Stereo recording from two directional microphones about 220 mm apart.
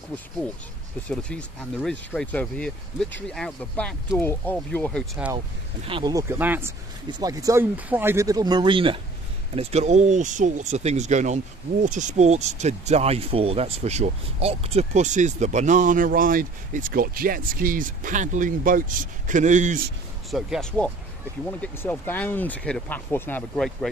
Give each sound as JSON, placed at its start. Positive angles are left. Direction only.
{"t": 1.1, "sound": "speech", "side_deg": 5}
{"t": 5.9, "sound": "speech", "side_deg": -20}
{"t": 20.2, "sound": "speech", "side_deg": 0}